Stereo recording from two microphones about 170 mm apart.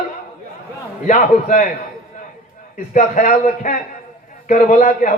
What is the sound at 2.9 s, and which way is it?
A man's voice, 45° left (ahead or behind).